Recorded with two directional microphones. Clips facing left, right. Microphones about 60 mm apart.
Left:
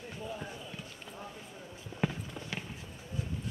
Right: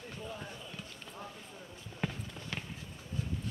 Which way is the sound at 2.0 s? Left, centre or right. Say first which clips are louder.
Left 4 dB; centre.